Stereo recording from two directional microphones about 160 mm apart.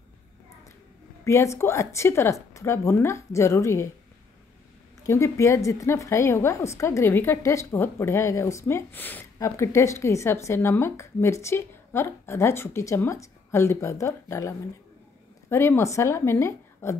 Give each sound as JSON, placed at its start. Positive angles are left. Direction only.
{"t": 1.2, "sound": "a woman's voice", "side_deg": 20}
{"t": 5.0, "sound": "a woman's voice", "side_deg": 20}
{"t": 15.5, "sound": "a woman's voice", "side_deg": 15}